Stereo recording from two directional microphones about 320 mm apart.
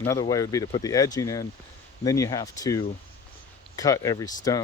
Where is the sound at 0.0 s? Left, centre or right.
Centre.